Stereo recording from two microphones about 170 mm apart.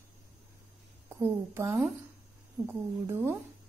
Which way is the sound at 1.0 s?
15° right (ahead or behind).